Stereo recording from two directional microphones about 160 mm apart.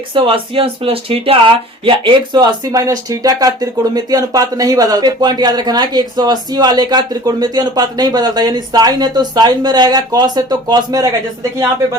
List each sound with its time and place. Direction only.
0.1 s speech: 35° right (ahead or behind)